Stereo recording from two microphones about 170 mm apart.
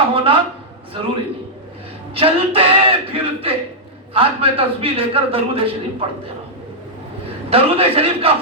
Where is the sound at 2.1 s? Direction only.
35° right (ahead or behind).